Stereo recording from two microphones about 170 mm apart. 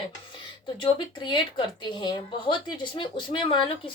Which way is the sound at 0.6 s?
30° left (ahead or behind).